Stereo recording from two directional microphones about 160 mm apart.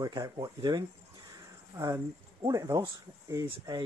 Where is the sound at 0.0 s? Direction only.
20° right (ahead or behind).